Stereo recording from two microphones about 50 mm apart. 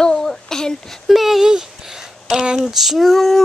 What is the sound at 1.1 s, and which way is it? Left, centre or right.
Speech, centre.